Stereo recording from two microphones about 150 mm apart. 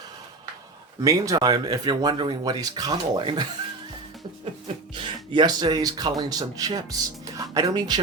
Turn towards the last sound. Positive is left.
turn(degrees=-25)  # may be behind; listen again after turning